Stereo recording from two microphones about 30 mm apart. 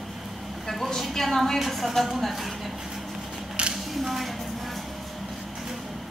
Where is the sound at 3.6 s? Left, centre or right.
Right.